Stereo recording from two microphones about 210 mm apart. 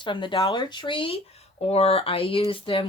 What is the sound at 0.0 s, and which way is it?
Speech, 20° left (ahead or behind).